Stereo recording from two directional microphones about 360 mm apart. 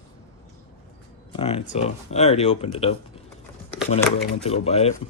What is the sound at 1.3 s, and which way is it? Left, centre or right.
Speech, centre.